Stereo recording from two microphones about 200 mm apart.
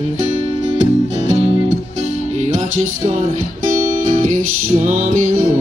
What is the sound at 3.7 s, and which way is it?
Music, 40° right (ahead or behind).